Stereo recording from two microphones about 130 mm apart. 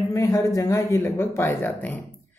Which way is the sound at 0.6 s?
20° left (ahead or behind).